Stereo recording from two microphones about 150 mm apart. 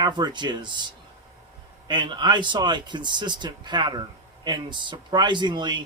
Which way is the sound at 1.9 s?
30° right (ahead or behind).